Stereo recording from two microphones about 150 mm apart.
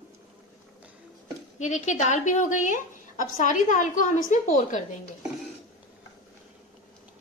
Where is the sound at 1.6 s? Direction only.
50° left (ahead or behind).